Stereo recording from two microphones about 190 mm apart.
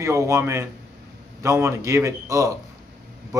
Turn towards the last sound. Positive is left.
turn(degrees=-15)  # may be behind; listen again after turning